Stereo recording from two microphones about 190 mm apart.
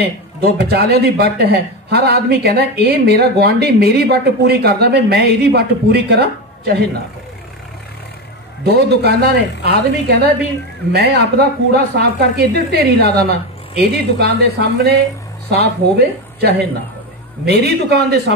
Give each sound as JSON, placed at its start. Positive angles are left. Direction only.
{"t": 0.0, "sound": "a man's voice", "side_deg": -55}
{"t": 8.6, "sound": "a man's voice", "side_deg": -60}